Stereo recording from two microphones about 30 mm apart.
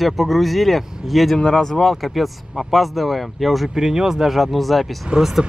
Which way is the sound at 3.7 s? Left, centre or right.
Right.